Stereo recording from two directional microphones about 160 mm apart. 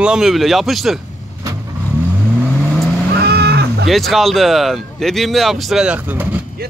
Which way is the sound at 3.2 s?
90° right.